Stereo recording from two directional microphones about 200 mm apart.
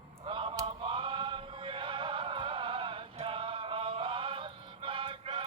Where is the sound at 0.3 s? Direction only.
25° right (ahead or behind).